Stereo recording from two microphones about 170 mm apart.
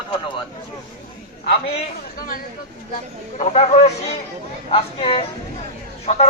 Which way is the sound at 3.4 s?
40° left (ahead or behind).